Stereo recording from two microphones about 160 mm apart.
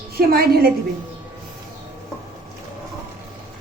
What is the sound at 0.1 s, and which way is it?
Speech, 75° right (ahead or behind).